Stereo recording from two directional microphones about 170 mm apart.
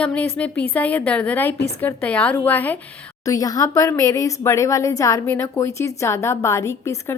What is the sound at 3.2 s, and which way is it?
Speech, 20° left (ahead or behind).